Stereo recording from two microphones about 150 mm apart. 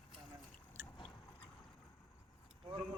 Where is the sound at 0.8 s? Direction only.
15° right (ahead or behind).